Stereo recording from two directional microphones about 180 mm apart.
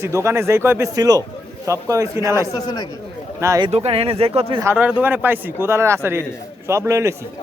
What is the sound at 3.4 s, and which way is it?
Speech, 15° right (ahead or behind).